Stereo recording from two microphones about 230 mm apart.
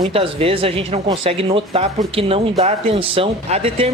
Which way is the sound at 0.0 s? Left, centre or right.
Right.